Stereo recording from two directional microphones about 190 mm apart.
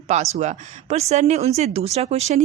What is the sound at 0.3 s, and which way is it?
Speech, 35° right (ahead or behind).